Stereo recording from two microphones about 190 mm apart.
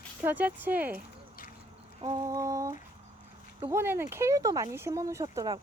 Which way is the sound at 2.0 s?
20° right (ahead or behind).